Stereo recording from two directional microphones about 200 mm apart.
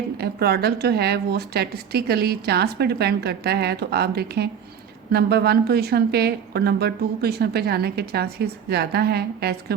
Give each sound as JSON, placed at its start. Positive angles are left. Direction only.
{"t": 0.2, "sound": "speech", "side_deg": -50}